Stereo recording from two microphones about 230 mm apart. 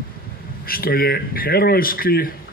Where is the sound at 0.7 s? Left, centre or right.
Left.